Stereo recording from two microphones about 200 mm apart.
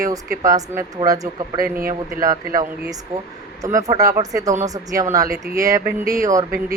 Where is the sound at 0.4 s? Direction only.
15° right (ahead or behind).